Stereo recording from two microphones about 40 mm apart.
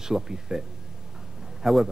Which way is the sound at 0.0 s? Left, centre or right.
Centre.